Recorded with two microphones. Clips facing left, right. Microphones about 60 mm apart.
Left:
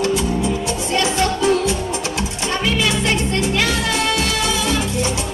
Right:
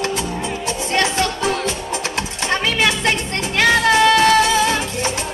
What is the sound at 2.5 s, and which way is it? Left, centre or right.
Music, right.